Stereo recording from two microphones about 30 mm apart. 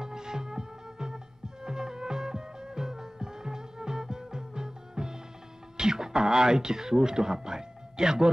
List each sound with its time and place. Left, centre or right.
0.0 s music: right
5.8 s speech: right